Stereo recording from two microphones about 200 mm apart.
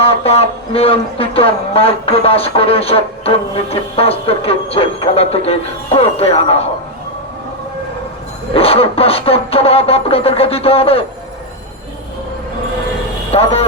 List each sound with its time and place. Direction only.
0.0 s speech: 30° left (ahead or behind)
8.5 s speech: 30° left (ahead or behind)
13.3 s speech: 30° left (ahead or behind)